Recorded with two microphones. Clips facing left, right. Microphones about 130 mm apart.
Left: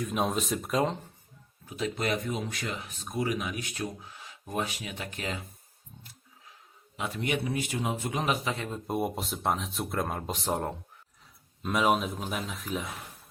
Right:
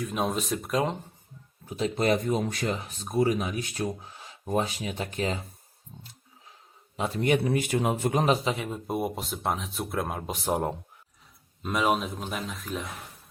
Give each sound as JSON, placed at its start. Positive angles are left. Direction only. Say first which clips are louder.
{"t": 0.0, "sound": "speech", "louder": "even", "side_deg": 0}
{"t": 1.6, "sound": "speech", "louder": "right 5 dB", "side_deg": -30}
{"t": 6.9, "sound": "a man's voice", "louder": "right 6 dB", "side_deg": -35}
{"t": 8.4, "sound": "speech", "louder": "right 3 dB", "side_deg": -10}